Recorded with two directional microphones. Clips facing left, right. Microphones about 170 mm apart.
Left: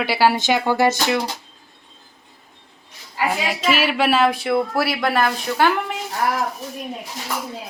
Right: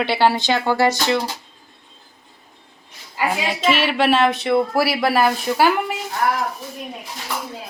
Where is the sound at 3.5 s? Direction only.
5° left (ahead or behind).